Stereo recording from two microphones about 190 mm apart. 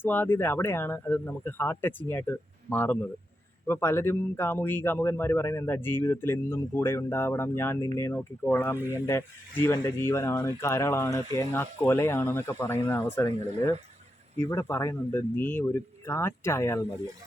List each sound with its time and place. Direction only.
0.0 s speech: 10° left (ahead or behind)